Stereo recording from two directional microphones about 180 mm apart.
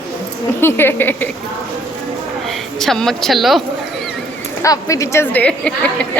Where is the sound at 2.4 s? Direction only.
Centre (ahead or behind).